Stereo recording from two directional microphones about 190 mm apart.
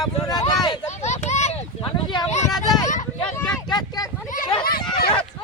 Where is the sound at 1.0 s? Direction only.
35° left (ahead or behind).